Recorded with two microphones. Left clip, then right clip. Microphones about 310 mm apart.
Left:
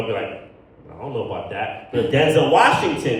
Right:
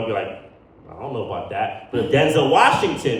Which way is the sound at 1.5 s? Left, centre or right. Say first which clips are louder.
Right 2 dB; centre.